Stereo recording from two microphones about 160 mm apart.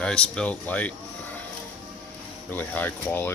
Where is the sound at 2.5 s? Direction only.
10° left (ahead or behind).